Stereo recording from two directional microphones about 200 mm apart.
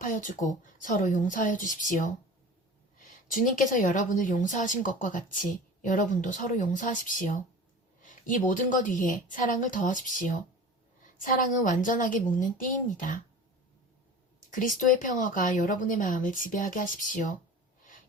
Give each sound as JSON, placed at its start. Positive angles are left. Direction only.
{"t": 0.0, "sound": "speech", "side_deg": 40}
{"t": 3.3, "sound": "speech", "side_deg": 40}
{"t": 14.5, "sound": "speech", "side_deg": 40}